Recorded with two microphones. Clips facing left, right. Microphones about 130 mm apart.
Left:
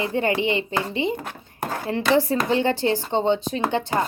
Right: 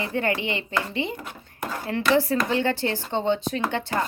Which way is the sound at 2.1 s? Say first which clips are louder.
Left 2 dB; 20° left (ahead or behind).